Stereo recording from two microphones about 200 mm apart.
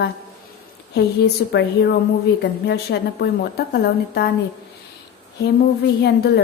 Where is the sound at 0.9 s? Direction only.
55° left (ahead or behind).